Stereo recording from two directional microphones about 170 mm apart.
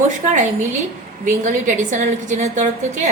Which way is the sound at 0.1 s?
45° right (ahead or behind).